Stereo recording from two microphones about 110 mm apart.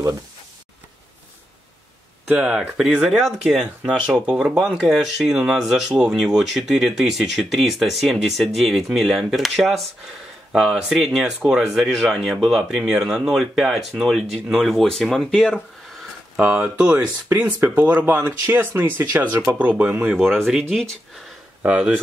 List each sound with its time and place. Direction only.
2.2 s speech: 10° right (ahead or behind); by 15.6 s 10° left (ahead or behind)
16.3 s speech: 15° right (ahead or behind)
20.2 s speech: centre (ahead or behind)
21.6 s speech: 10° right (ahead or behind)